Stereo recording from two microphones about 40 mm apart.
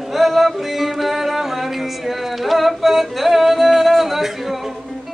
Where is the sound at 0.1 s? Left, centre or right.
Centre.